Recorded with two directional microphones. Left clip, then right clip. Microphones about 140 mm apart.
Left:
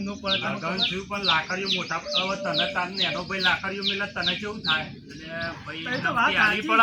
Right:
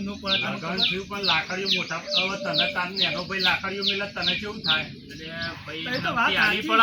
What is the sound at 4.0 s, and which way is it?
Speech, 5° right (ahead or behind).